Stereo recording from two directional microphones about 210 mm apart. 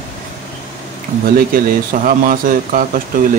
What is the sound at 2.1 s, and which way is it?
Speech, 40° right (ahead or behind).